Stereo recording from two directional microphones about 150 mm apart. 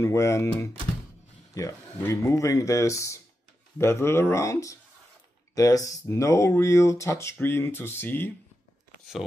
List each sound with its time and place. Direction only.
0.0 s speech: 20° left (ahead or behind)